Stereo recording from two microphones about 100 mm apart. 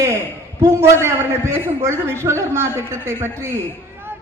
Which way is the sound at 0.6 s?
30° right (ahead or behind).